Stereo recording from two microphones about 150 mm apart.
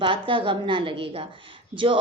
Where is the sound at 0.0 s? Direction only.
35° right (ahead or behind).